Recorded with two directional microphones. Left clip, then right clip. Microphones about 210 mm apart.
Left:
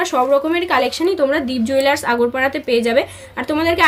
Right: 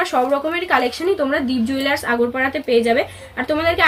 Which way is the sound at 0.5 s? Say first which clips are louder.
Left 1 dB; 50° left (ahead or behind).